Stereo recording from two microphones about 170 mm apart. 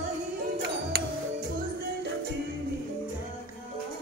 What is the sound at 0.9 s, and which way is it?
Music, 65° right (ahead or behind).